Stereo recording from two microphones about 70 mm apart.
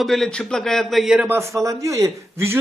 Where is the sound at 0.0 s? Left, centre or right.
Centre.